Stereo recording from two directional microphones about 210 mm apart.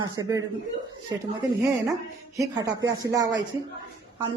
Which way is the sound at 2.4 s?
15° right (ahead or behind).